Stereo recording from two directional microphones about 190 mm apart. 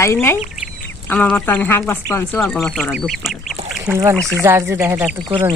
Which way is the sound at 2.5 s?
Centre (ahead or behind).